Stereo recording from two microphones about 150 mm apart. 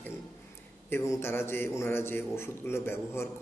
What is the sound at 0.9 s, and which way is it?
A man's voice, 15° left (ahead or behind).